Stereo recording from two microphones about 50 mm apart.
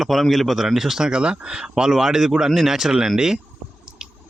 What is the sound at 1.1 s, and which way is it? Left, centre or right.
Speech, centre.